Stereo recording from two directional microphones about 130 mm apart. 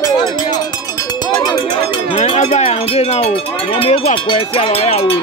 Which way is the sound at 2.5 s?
50° left (ahead or behind).